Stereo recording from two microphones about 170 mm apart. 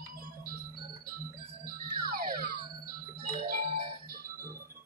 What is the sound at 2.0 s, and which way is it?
Music, 60° right (ahead or behind).